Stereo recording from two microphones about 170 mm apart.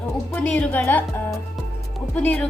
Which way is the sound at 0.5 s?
10° left (ahead or behind).